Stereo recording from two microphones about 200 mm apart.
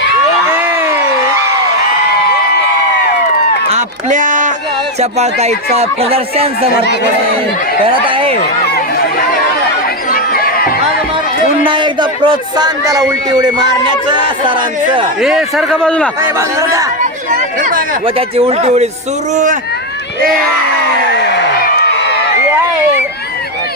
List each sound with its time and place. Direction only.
0.5 s a sound: 10° right (ahead or behind)
3.7 s a sound: 40° right (ahead or behind)
4.9 s speech: 35° right (ahead or behind)
7.9 s speech: 25° right (ahead or behind)
10.1 s crowd: 45° left (ahead or behind)
11.4 s speech: 25° right (ahead or behind)
15.2 s a man's voice: centre (ahead or behind)
16.4 s speech: 15° right (ahead or behind)
17.6 s a sound: 45° right (ahead or behind)
18.0 s speech: 30° right (ahead or behind)
21.2 s crowd: 55° left (ahead or behind)